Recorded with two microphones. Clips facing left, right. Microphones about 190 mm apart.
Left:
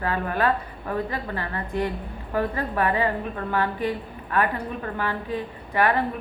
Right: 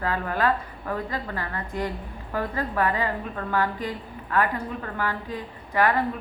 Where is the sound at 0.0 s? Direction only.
25° left (ahead or behind).